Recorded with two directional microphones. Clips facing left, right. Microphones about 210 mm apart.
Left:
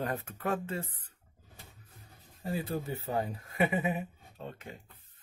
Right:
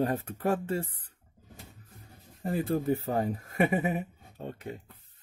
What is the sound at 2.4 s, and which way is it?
Speech, 50° right (ahead or behind).